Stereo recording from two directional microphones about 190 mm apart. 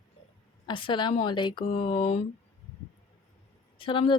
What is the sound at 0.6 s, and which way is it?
Speech, 25° left (ahead or behind).